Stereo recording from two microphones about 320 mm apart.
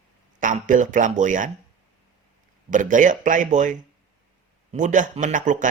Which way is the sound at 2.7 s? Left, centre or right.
Right.